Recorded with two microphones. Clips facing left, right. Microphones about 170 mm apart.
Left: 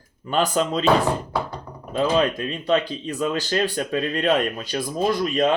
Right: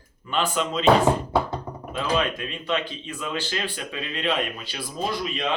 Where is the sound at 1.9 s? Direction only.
35° left (ahead or behind).